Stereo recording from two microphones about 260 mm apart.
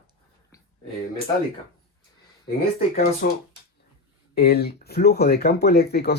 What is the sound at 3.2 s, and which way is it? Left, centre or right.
Speech, left.